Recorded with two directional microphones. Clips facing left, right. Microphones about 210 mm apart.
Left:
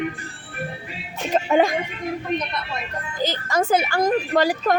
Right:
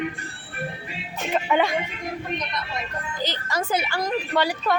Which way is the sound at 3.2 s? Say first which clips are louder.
Left 6 dB; 50° left (ahead or behind).